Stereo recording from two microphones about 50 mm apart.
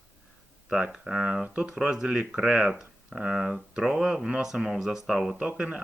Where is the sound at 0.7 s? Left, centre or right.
Centre.